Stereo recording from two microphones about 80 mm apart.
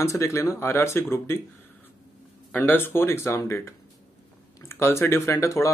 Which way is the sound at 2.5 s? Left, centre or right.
Left.